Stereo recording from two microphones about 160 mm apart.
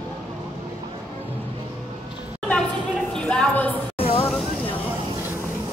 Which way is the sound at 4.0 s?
35° left (ahead or behind).